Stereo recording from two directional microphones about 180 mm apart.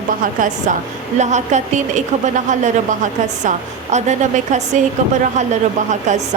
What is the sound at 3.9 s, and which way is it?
Speech, 40° right (ahead or behind).